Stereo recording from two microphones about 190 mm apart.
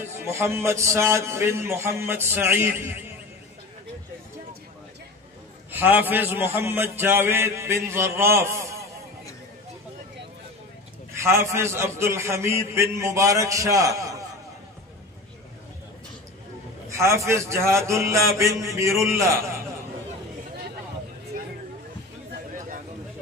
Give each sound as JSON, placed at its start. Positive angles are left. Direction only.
{"t": 0.3, "sound": "a man's voice", "side_deg": -15}
{"t": 5.7, "sound": "a man's voice", "side_deg": -10}
{"t": 11.1, "sound": "a man's voice", "side_deg": -15}
{"t": 16.9, "sound": "a man's voice", "side_deg": -15}
{"t": 22.3, "sound": "a sound", "side_deg": -45}